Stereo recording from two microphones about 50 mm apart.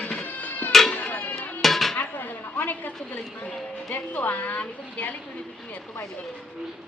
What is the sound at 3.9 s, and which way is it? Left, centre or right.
Speech, left.